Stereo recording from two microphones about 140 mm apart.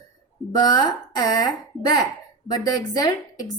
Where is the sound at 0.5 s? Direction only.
30° left (ahead or behind).